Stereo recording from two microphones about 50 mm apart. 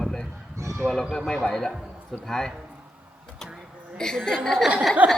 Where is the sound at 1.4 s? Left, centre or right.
Centre.